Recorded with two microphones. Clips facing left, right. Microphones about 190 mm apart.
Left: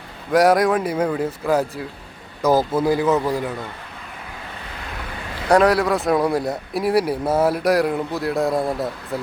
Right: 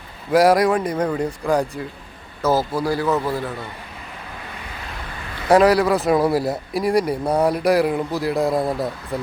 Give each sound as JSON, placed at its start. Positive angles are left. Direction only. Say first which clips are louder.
{"t": 0.3, "sound": "speech", "louder": "right 1 dB", "side_deg": 0}
{"t": 2.4, "sound": "a man's voice", "louder": "left 2 dB", "side_deg": 15}
{"t": 5.5, "sound": "speech", "louder": "right 1 dB", "side_deg": 0}